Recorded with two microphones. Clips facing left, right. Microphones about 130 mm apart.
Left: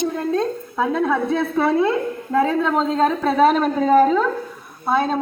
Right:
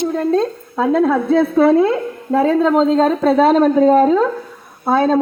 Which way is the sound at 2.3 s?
25° right (ahead or behind).